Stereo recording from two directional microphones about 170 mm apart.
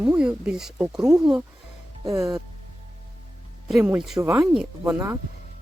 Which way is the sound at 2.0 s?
20° right (ahead or behind).